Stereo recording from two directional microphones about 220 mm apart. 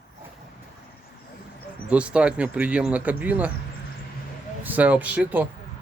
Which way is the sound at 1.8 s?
5° right (ahead or behind).